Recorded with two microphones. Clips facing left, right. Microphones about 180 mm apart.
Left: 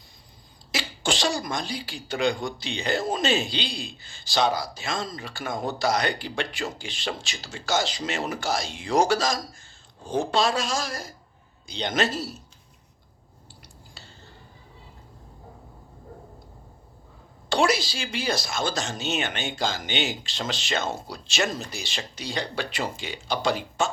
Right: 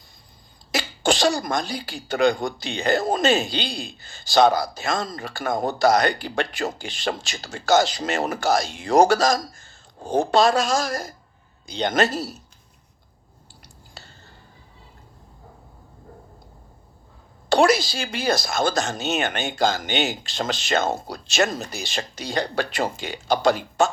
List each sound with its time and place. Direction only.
0.7 s speech: 45° right (ahead or behind)
17.5 s speech: 45° right (ahead or behind)